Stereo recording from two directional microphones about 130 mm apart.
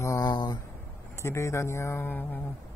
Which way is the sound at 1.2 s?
20° left (ahead or behind).